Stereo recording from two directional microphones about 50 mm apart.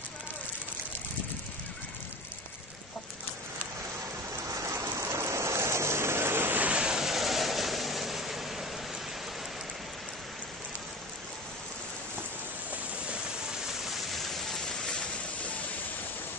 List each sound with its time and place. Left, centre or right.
4.5 s a sound: right
5.0 s vehicle: right
6.6 s vehicle: right
7.1 s vehicle: centre